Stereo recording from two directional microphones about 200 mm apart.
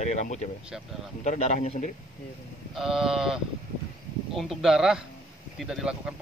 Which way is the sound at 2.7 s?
Centre (ahead or behind).